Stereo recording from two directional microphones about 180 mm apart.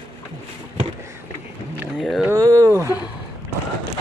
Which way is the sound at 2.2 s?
20° right (ahead or behind).